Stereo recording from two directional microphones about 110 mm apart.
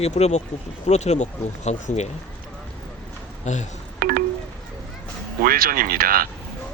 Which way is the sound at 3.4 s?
90° left.